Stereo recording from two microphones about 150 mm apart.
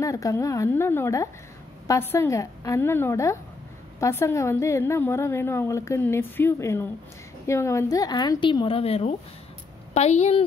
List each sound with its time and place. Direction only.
0.0 s a woman's voice: 20° left (ahead or behind); by 10.4 s 45° left (ahead or behind)